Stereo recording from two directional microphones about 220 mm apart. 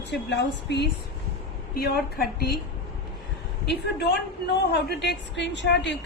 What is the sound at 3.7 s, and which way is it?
A woman's voice, 50° left (ahead or behind).